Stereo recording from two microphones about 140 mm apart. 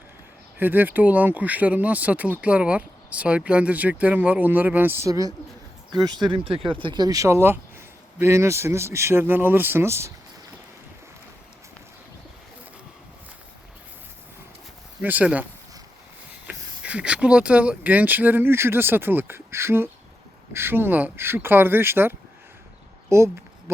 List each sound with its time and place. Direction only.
0.6 s speech: 15° right (ahead or behind)
15.0 s speech: 10° right (ahead or behind)
16.5 s speech: 10° right (ahead or behind)
23.0 s a sound: 20° right (ahead or behind)